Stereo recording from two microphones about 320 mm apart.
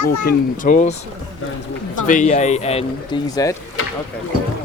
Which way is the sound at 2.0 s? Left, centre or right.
Left.